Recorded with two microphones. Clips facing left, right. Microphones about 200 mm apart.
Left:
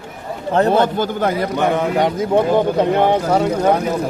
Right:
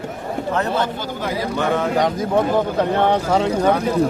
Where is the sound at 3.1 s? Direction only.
10° left (ahead or behind).